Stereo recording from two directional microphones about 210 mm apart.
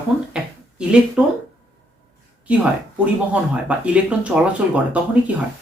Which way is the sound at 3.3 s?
5° right (ahead or behind).